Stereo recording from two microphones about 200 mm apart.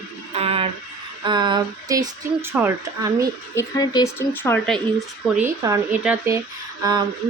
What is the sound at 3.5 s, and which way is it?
Speech, 15° left (ahead or behind).